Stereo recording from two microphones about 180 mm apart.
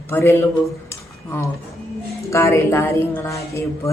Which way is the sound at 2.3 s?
15° left (ahead or behind).